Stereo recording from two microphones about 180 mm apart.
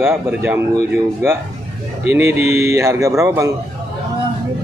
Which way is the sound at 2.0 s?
15° right (ahead or behind).